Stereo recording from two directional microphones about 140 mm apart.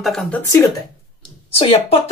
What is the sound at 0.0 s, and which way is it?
Speech, centre (ahead or behind).